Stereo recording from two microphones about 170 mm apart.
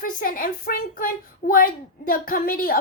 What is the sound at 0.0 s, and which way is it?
A child's voice, 55° left (ahead or behind).